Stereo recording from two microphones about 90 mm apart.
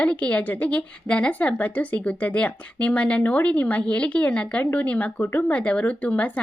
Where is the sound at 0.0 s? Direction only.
15° left (ahead or behind).